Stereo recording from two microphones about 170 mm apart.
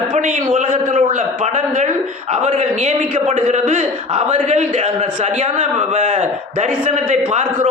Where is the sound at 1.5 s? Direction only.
45° right (ahead or behind).